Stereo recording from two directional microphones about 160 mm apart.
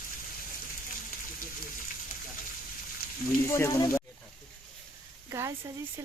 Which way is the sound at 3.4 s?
15° left (ahead or behind).